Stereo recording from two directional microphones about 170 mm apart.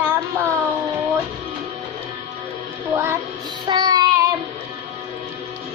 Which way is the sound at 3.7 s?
25° right (ahead or behind).